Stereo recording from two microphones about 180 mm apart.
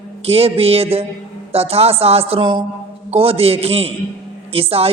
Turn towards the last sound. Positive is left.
turn(degrees=-35)  # may be behind; listen again after turning